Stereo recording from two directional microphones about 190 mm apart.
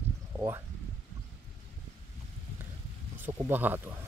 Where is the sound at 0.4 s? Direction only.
15° right (ahead or behind).